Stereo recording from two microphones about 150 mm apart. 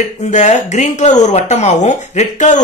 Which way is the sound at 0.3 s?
50° left (ahead or behind).